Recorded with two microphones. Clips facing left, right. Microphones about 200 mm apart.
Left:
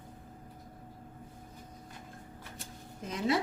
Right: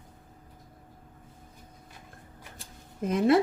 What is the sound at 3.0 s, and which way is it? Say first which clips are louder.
Speech: right 8 dB; 55° right (ahead or behind).